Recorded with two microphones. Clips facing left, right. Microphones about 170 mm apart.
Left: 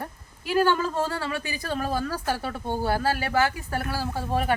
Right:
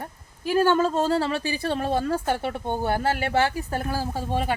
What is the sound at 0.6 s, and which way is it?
Speech, 25° right (ahead or behind).